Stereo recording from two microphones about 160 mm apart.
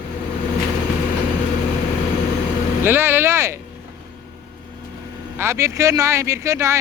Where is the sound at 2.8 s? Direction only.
15° right (ahead or behind).